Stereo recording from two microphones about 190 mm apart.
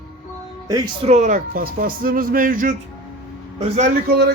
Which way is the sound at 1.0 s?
35° right (ahead or behind).